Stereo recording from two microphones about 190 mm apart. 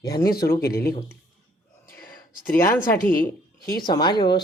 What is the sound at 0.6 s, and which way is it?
Speech, 55° left (ahead or behind).